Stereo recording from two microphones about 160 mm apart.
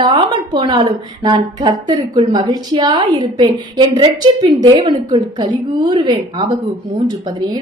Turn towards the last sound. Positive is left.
turn(degrees=-25)  # may be behind; listen again after turning